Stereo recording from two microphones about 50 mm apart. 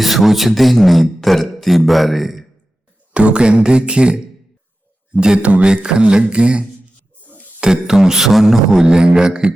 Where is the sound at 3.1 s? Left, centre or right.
Right.